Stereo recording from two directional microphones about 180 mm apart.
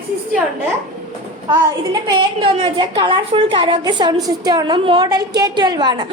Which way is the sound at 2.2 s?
30° right (ahead or behind).